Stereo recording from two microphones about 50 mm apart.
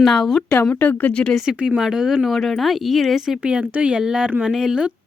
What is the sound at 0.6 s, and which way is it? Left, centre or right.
Speech, left.